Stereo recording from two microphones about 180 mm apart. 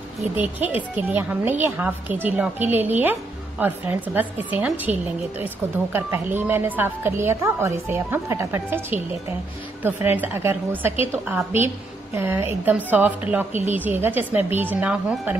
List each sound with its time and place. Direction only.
0.4 s a woman's voice: 10° right (ahead or behind)
5.9 s a woman's voice: 15° right (ahead or behind)